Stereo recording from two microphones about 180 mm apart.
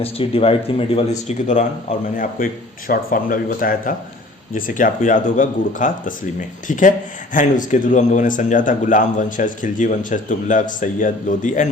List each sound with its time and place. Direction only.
0.0 s speech: 30° left (ahead or behind)